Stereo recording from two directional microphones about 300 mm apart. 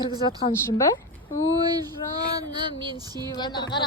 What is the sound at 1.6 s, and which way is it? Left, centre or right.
Female singing, centre.